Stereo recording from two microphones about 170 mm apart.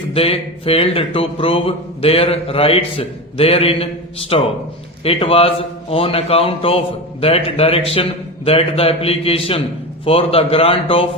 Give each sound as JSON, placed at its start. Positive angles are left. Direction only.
{"t": 0.1, "sound": "speech", "side_deg": 35}